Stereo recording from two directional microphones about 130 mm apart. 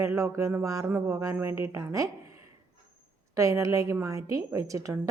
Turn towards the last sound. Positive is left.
turn(degrees=-25)  # may be behind; listen again after turning